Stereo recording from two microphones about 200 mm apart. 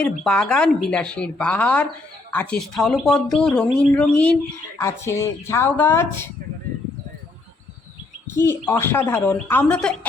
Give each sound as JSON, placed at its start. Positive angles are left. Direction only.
{"t": 0.0, "sound": "a woman's voice", "side_deg": 5}
{"t": 8.3, "sound": "a woman's voice", "side_deg": 15}